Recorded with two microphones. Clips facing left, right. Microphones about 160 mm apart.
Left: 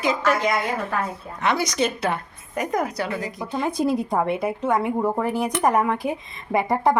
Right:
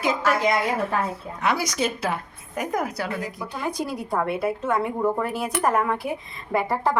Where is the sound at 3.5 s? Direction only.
25° left (ahead or behind).